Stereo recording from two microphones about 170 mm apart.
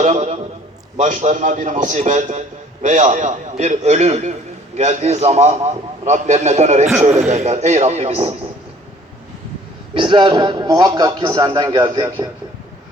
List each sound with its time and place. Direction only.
0.0 s a sound: 45° right (ahead or behind)
0.9 s a man's voice: 45° right (ahead or behind)
9.9 s a man's voice: 30° right (ahead or behind)